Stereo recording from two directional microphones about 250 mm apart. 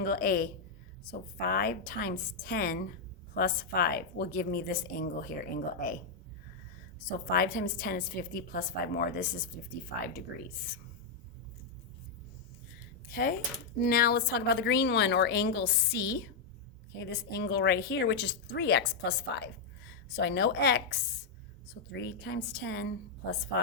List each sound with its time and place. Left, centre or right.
0.0 s a woman's voice: left
7.3 s a woman's voice: left
13.1 s a woman's voice: left
20.1 s a woman's voice: left